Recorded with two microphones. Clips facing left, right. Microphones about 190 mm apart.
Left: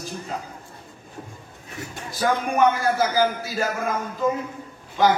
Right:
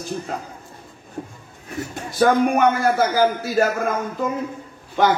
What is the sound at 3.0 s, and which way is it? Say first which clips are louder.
Speech: right 3 dB; 60° right (ahead or behind).